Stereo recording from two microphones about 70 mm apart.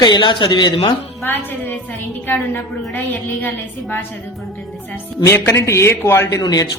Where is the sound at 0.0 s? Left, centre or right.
Left.